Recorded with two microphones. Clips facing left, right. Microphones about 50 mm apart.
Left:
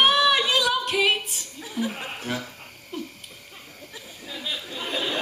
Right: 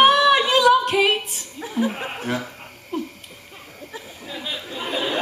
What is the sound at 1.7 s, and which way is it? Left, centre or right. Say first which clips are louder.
Chuckle: right 5 dB; right.